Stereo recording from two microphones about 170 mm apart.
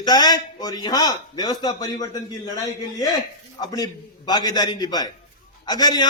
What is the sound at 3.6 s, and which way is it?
A man's voice, 25° left (ahead or behind).